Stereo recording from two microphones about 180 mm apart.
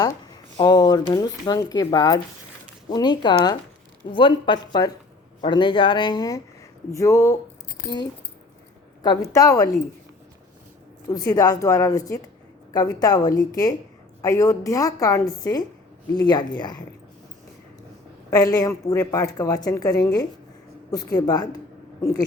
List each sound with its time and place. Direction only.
0.5 s a woman's voice: 25° left (ahead or behind)
9.3 s a woman's voice: 20° left (ahead or behind)
11.1 s a woman's voice: 20° left (ahead or behind)
18.3 s a woman's voice: 20° left (ahead or behind)